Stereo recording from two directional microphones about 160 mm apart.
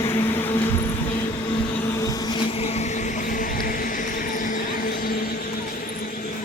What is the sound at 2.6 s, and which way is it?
Music, 40° left (ahead or behind).